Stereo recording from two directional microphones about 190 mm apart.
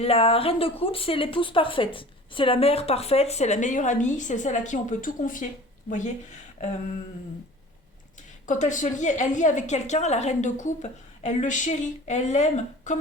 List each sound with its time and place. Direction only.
0.0 s speech: 30° left (ahead or behind)
8.4 s speech: 40° left (ahead or behind)